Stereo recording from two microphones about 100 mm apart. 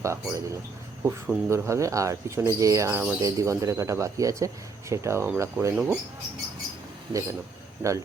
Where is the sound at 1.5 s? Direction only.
30° right (ahead or behind).